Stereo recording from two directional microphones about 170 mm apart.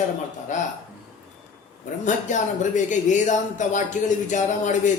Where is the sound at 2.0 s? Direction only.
45° left (ahead or behind).